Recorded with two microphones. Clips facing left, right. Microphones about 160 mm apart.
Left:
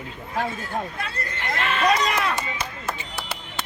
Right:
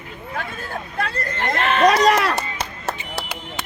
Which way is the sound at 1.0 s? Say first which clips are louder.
Right 7 dB; 60° right (ahead or behind).